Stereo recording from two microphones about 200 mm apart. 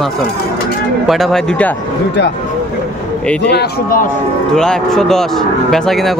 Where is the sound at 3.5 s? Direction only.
50° left (ahead or behind).